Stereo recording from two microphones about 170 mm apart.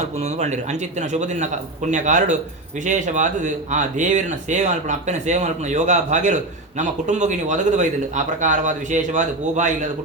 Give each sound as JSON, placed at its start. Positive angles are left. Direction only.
{"t": 0.0, "sound": "speech", "side_deg": -40}